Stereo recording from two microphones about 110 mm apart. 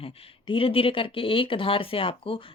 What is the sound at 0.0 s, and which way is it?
Speech, 55° left (ahead or behind).